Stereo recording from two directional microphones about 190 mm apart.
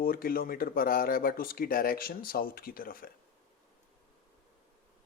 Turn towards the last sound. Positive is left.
turn(degrees=50)  # may be behind; listen again after turning